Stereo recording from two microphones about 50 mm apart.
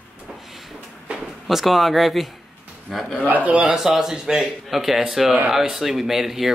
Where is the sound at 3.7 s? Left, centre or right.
Centre.